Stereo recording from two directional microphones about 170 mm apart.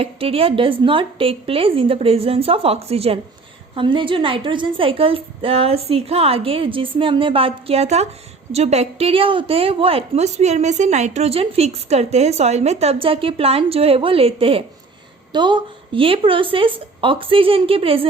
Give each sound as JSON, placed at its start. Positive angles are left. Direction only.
{"t": 0.0, "sound": "a woman's voice", "side_deg": -35}